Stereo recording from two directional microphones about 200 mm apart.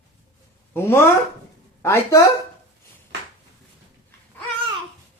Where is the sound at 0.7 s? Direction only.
10° left (ahead or behind).